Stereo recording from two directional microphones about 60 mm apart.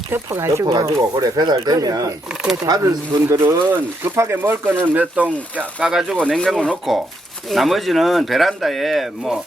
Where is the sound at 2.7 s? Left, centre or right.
Right.